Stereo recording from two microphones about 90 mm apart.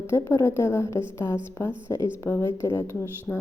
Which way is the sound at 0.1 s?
30° left (ahead or behind).